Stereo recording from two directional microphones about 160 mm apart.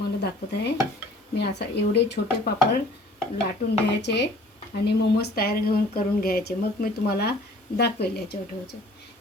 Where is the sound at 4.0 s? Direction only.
90° left.